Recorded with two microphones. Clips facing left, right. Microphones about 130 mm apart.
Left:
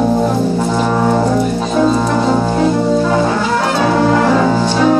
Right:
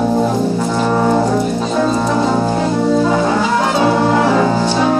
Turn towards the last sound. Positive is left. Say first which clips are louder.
# left 2 dB
turn(degrees=-10)  # may be behind; listen again after turning